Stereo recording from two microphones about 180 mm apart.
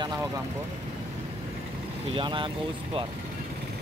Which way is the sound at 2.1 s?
25° right (ahead or behind).